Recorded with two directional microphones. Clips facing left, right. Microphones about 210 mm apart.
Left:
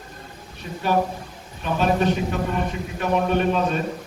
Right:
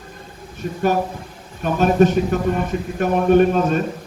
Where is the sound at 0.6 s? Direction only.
50° right (ahead or behind).